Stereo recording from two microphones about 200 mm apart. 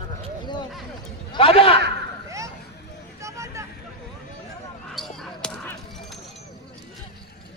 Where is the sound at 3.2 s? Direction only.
15° right (ahead or behind).